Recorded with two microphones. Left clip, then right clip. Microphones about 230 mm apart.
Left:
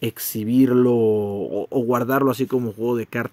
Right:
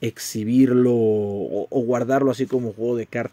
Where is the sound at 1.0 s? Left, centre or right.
Right.